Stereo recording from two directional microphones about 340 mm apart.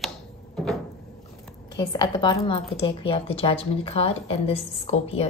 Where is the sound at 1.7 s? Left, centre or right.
Centre.